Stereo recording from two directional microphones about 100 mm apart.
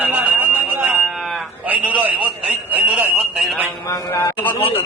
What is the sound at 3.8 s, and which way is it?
Speech, 30° left (ahead or behind).